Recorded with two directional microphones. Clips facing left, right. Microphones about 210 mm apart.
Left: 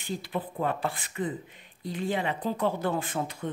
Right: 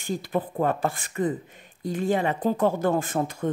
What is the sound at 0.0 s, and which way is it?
Speech, 45° right (ahead or behind).